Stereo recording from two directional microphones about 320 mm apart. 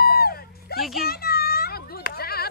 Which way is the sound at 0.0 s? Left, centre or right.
Left.